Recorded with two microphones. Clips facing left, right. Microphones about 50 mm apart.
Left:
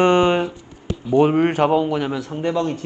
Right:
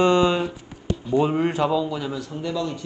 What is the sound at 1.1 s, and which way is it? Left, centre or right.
A man's voice, left.